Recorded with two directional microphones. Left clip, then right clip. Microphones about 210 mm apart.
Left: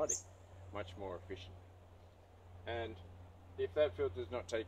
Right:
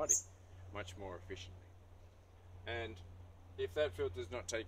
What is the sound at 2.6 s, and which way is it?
Speech, 10° right (ahead or behind).